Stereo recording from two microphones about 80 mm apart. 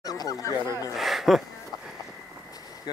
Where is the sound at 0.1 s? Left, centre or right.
Left.